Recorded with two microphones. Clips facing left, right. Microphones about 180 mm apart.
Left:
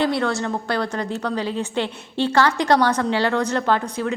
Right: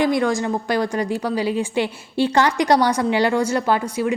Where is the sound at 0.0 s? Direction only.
10° right (ahead or behind).